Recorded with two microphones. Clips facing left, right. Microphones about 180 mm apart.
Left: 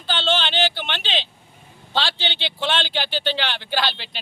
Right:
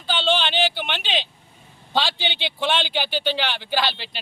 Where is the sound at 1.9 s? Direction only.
15° right (ahead or behind).